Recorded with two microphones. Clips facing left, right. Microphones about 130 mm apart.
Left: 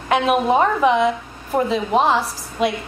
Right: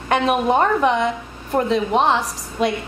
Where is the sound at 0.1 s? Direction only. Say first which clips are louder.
Left 1 dB; centre (ahead or behind).